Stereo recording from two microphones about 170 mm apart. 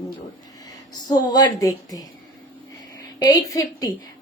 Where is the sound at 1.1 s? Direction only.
25° left (ahead or behind).